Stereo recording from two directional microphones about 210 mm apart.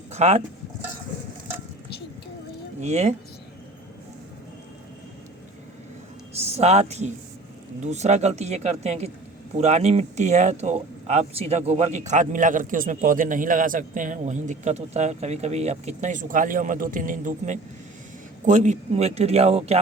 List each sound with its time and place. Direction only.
0.1 s speech: 30° right (ahead or behind)
2.8 s speech: 30° right (ahead or behind)
6.4 s speech: 30° right (ahead or behind)